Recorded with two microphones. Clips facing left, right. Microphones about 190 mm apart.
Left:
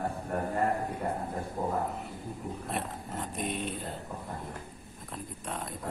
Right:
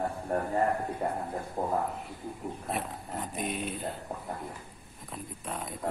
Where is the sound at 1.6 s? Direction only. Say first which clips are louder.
Even; 30° right (ahead or behind).